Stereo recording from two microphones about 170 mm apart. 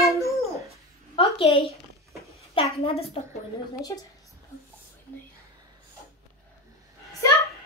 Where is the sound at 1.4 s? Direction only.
35° left (ahead or behind).